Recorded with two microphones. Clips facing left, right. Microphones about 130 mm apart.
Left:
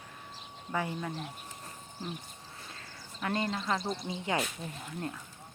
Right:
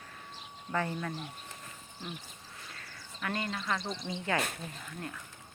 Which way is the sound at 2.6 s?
25° left (ahead or behind).